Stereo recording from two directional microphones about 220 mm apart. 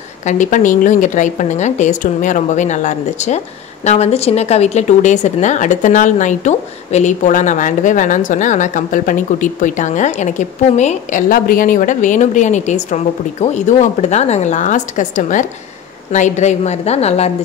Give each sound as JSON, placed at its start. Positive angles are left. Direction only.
{"t": 0.2, "sound": "a woman's voice", "side_deg": 35}